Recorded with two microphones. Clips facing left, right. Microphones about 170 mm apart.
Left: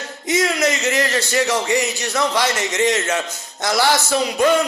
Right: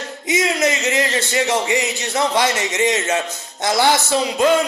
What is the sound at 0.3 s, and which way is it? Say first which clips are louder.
Speech: even; 20° right (ahead or behind).